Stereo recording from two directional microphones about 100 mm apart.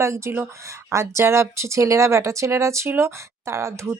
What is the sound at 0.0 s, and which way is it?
A woman's voice, 30° right (ahead or behind).